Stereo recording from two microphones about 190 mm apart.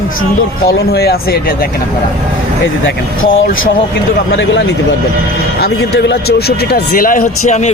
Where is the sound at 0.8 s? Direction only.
60° left (ahead or behind).